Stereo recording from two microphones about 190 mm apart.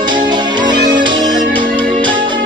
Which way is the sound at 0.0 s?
25° right (ahead or behind).